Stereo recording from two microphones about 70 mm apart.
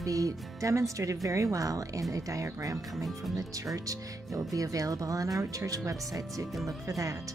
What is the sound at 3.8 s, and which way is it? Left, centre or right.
Speech, right.